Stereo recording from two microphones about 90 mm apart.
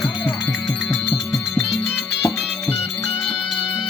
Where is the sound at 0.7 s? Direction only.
10° left (ahead or behind).